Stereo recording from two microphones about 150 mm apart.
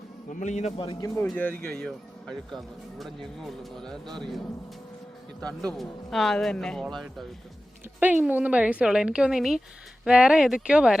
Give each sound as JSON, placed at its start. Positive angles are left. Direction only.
{"t": 0.3, "sound": "a man's voice", "side_deg": 55}
{"t": 1.0, "sound": "speech", "side_deg": 20}
{"t": 5.4, "sound": "speech", "side_deg": 5}
{"t": 7.9, "sound": "a woman's voice", "side_deg": -10}